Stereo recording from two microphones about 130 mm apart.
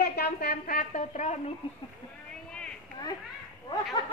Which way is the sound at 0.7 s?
75° left (ahead or behind).